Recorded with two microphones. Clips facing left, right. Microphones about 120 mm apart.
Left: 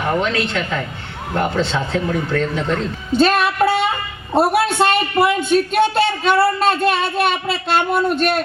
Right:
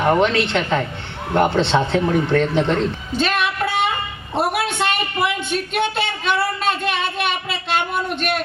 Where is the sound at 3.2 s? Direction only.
40° left (ahead or behind).